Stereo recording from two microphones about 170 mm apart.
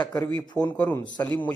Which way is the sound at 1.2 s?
15° left (ahead or behind).